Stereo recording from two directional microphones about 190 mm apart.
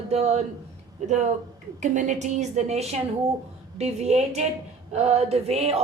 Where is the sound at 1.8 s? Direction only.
40° right (ahead or behind).